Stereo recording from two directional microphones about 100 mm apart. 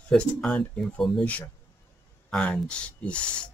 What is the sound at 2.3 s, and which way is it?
Speech, 10° left (ahead or behind).